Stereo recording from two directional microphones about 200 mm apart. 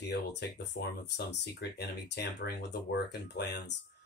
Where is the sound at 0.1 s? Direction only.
60° left (ahead or behind).